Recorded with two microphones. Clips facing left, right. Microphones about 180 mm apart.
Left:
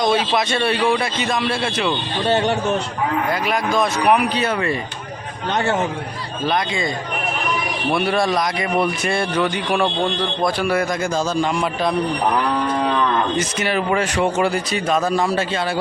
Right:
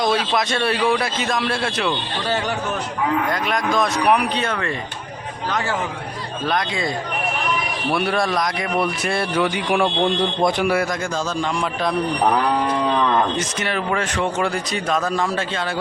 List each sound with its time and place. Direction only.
0.0 s speech: centre (ahead or behind)
2.2 s speech: 25° left (ahead or behind)
3.2 s speech: 5° left (ahead or behind)
5.5 s speech: 25° left (ahead or behind)
6.4 s speech: centre (ahead or behind)
7.9 s speech: centre (ahead or behind); by 10.7 s 20° right (ahead or behind)
11.5 s speech: centre (ahead or behind)
13.4 s speech: 5° left (ahead or behind)